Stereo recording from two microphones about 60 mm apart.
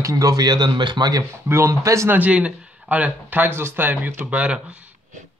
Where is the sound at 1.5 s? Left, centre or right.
Right.